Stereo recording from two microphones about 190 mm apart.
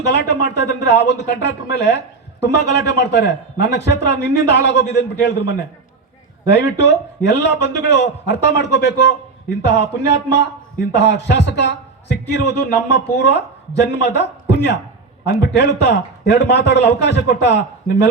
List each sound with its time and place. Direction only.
0.0 s a man's voice: 65° left (ahead or behind)